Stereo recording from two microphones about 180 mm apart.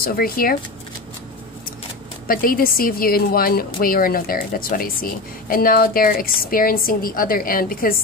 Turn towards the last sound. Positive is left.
turn(degrees=50)  # may be behind; listen again after turning